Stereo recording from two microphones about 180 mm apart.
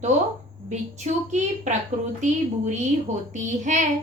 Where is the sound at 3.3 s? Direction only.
45° right (ahead or behind).